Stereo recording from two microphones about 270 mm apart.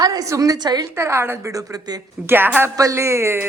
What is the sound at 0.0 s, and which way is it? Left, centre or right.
A woman's voice, centre.